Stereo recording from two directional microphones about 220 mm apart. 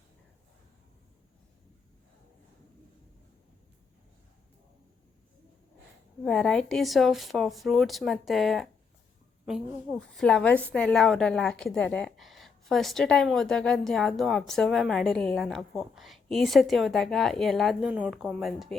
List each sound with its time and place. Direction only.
6.2 s a woman's voice: 5° left (ahead or behind)
10.2 s a woman's voice: 5° left (ahead or behind)